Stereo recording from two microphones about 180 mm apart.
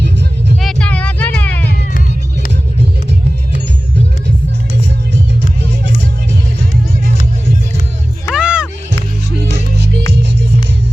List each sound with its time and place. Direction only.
0.6 s music: 5° left (ahead or behind)
8.3 s music: 5° right (ahead or behind)
9.5 s music: 75° right (ahead or behind)